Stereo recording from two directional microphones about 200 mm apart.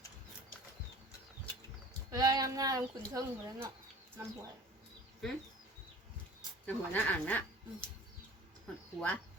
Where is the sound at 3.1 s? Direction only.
15° right (ahead or behind).